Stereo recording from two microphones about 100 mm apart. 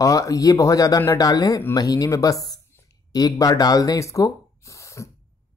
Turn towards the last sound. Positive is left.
turn(degrees=30)  # may be behind; listen again after turning